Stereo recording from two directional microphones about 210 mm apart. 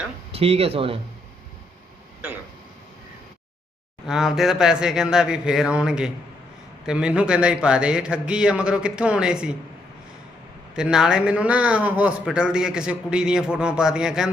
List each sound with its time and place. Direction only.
0.3 s speech: 30° right (ahead or behind)
4.0 s speech: centre (ahead or behind)
10.8 s speech: 5° right (ahead or behind)